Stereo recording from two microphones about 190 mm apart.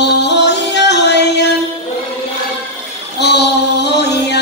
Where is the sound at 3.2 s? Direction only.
60° left (ahead or behind).